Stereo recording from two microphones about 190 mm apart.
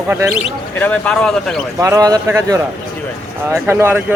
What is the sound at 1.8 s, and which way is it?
Speech, 15° right (ahead or behind).